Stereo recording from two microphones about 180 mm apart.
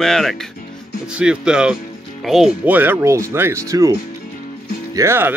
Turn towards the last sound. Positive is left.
turn(degrees=-15)  # may be behind; listen again after turning